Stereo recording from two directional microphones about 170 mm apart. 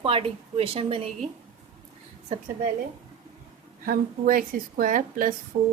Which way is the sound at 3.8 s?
55° right (ahead or behind).